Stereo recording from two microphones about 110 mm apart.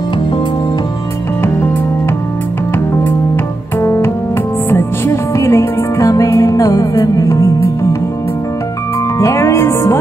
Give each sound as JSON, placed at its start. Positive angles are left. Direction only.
{"t": 3.8, "sound": "music", "side_deg": 25}
{"t": 9.2, "sound": "music", "side_deg": 25}